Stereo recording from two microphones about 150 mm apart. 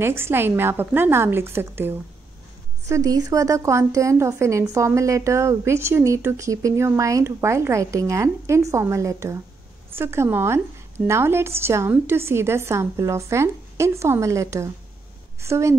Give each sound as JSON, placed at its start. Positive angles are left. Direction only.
{"t": 0.0, "sound": "a woman's voice", "side_deg": -15}